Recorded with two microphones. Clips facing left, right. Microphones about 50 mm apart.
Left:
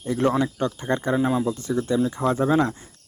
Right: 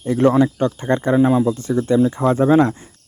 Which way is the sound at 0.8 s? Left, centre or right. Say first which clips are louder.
Right 5 dB; right.